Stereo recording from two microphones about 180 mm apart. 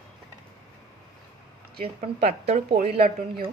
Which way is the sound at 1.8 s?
35° right (ahead or behind).